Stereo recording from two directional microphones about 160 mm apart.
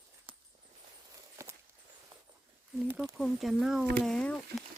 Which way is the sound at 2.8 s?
10° right (ahead or behind).